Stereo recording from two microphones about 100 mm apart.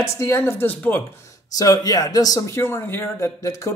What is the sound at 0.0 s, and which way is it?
Speech, 25° left (ahead or behind).